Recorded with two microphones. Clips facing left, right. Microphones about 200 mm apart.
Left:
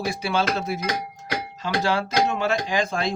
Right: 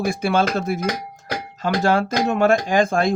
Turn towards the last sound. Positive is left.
turn(degrees=-50)  # may be behind; listen again after turning